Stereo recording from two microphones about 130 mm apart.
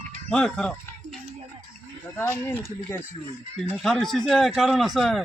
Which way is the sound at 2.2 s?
20° left (ahead or behind).